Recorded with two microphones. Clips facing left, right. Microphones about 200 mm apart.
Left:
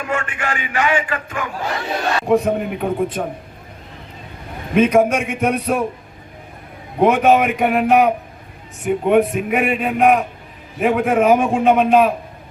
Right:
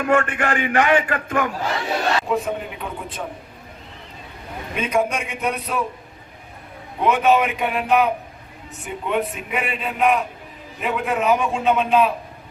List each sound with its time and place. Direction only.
0.1 s a man's voice: 60° right (ahead or behind)
2.2 s a man's voice: 50° left (ahead or behind)
4.7 s a man's voice: 50° left (ahead or behind)
7.0 s a man's voice: 50° left (ahead or behind)